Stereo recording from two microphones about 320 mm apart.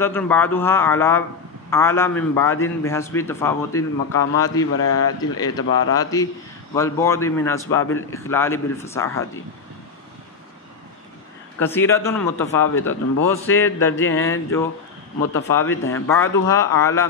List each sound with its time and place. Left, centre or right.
0.0 s a man's voice: centre
4.7 s speech: left
5.9 s a man's voice: centre
11.6 s a man's voice: centre
15.9 s a man's voice: centre